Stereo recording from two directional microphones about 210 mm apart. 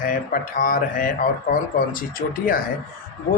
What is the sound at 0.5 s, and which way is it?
A man's voice, 40° left (ahead or behind).